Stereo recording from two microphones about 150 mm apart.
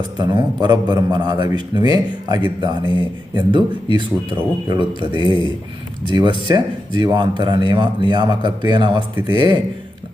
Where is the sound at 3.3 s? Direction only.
30° right (ahead or behind).